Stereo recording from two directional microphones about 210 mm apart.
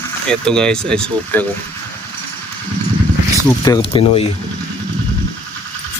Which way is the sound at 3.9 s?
25° left (ahead or behind).